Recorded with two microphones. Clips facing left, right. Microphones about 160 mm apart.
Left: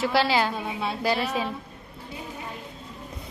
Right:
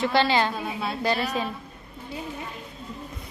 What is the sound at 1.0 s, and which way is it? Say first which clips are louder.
Speech: even; 5° left (ahead or behind).